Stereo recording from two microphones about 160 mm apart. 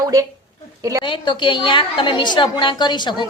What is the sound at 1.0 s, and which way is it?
A woman's voice, 30° left (ahead or behind).